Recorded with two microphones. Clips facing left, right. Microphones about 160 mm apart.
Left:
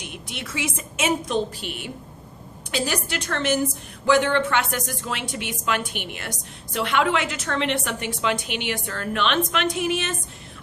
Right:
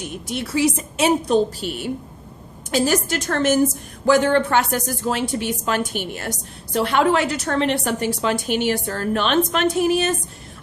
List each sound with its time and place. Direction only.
0.0 s a woman's voice: 40° right (ahead or behind)